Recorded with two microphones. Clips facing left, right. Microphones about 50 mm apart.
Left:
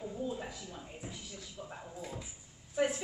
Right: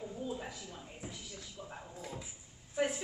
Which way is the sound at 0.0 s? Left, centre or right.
Centre.